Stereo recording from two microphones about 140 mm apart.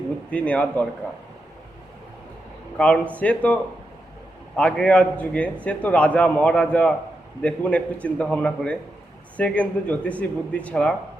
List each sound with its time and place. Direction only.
0.3 s speech: 10° left (ahead or behind)
2.7 s speech: 5° left (ahead or behind)